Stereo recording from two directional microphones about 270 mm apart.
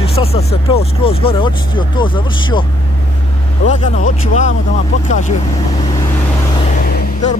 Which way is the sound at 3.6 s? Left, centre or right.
Left.